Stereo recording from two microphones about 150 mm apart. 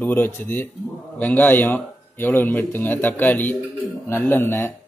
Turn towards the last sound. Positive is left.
turn(degrees=15)  # may be behind; listen again after turning